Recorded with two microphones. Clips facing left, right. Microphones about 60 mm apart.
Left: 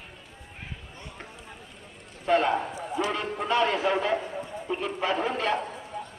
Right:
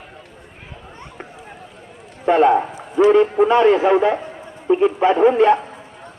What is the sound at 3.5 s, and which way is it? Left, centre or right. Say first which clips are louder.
Speech: right 7 dB; right.